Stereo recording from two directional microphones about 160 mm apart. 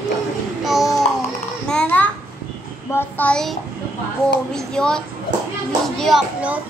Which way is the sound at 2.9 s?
10° left (ahead or behind).